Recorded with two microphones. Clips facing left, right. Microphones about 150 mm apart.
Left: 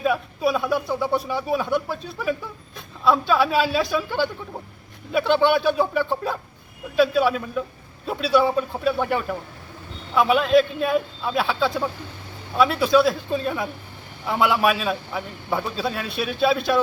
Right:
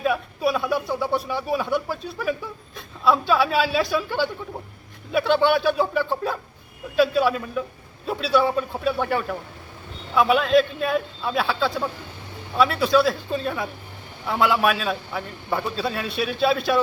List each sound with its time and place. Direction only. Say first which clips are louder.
0.0 s a man's voice: left 1 dB; centre (ahead or behind)